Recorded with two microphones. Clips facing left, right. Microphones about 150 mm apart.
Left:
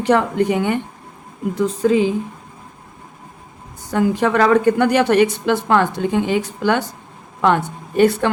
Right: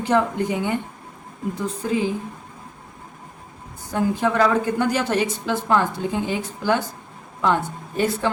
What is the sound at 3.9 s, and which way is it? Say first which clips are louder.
A woman's voice: left 4 dB; 80° left.